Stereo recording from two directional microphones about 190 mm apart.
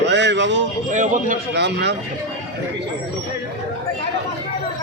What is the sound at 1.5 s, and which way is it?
Speech, 60° right (ahead or behind).